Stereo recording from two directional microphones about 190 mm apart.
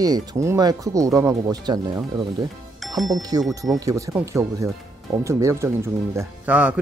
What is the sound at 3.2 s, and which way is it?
Speech, 20° right (ahead or behind).